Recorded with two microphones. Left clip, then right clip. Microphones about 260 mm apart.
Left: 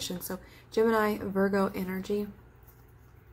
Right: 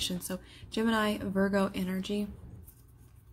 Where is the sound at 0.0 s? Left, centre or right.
Right.